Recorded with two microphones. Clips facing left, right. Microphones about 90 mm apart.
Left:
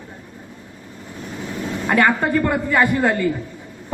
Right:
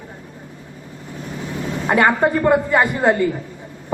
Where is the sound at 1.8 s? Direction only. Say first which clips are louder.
Right 2 dB; 20° right (ahead or behind).